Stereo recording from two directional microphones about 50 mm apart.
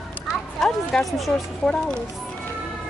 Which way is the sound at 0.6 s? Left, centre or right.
Centre.